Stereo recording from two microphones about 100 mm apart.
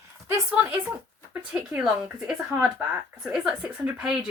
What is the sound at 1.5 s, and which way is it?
Speech, 5° right (ahead or behind).